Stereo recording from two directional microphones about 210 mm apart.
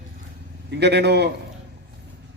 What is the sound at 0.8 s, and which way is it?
Speech, 50° right (ahead or behind).